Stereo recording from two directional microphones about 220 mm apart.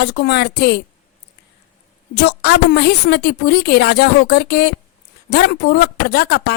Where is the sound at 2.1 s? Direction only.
50° left (ahead or behind).